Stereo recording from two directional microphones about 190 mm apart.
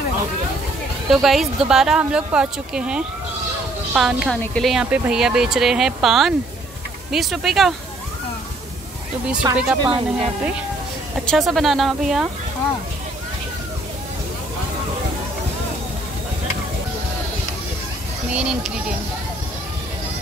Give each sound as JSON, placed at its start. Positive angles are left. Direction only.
{"t": 1.1, "sound": "speech", "side_deg": 0}
{"t": 9.3, "sound": "speech", "side_deg": -5}
{"t": 18.3, "sound": "speech", "side_deg": -5}